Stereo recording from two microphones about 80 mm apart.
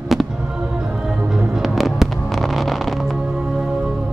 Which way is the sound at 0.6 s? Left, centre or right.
Centre.